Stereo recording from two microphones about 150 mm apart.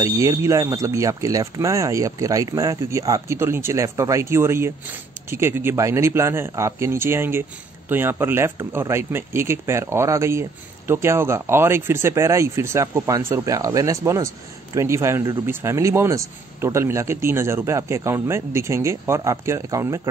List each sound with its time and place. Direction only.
0.0 s speech: 20° right (ahead or behind)